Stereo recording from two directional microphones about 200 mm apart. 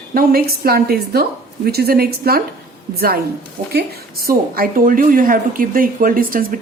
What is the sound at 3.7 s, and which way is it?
A woman's voice, 50° right (ahead or behind).